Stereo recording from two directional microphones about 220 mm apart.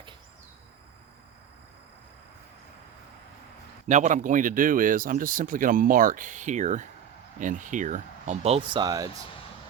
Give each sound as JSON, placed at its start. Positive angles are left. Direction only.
{"t": 3.8, "sound": "speech", "side_deg": -35}